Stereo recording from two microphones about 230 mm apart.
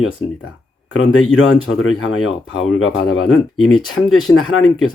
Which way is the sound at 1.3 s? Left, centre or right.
Left.